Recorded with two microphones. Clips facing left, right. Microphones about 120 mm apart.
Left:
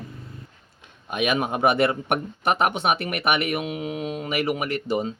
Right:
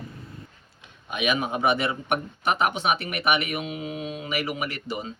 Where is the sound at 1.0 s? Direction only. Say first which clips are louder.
Left 2 dB; 45° left (ahead or behind).